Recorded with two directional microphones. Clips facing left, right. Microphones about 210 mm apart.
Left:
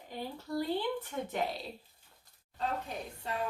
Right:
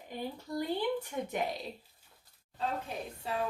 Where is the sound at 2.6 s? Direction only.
Centre (ahead or behind).